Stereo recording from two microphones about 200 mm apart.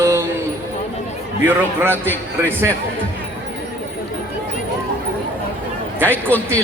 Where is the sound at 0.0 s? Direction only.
15° right (ahead or behind).